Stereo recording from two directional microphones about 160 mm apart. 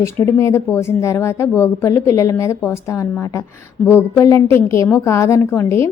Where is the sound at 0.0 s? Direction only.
15° left (ahead or behind).